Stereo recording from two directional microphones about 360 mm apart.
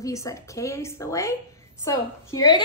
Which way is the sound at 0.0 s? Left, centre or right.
Centre.